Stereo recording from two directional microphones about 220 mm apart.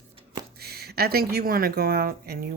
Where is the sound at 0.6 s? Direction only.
45° right (ahead or behind).